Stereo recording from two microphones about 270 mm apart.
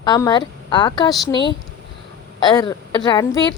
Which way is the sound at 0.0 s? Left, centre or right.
Centre.